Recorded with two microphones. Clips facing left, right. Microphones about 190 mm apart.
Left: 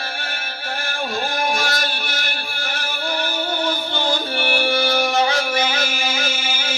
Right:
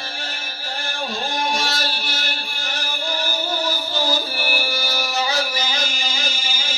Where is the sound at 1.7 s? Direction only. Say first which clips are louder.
Left 2 dB; 30° right (ahead or behind).